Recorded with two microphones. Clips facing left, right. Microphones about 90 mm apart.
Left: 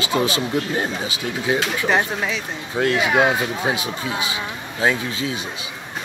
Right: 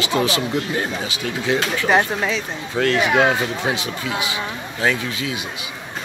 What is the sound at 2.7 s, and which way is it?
Speech, 15° left (ahead or behind).